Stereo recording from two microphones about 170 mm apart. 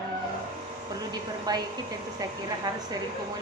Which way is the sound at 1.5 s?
25° right (ahead or behind).